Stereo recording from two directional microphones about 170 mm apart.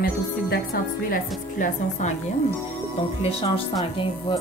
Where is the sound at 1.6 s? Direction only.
45° left (ahead or behind).